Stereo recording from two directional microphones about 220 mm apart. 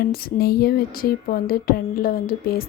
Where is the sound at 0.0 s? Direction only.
45° left (ahead or behind).